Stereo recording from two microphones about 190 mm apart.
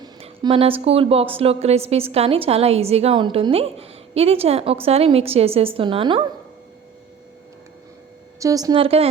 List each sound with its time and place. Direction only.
0.0 s speech: 25° right (ahead or behind)
8.4 s a woman's voice: 20° right (ahead or behind)